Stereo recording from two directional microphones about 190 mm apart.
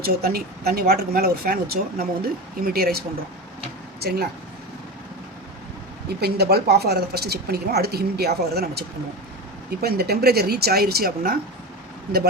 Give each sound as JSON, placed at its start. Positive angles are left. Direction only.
{"t": 0.0, "sound": "speech", "side_deg": -55}
{"t": 4.0, "sound": "a woman's voice", "side_deg": -55}
{"t": 6.1, "sound": "a woman's voice", "side_deg": -55}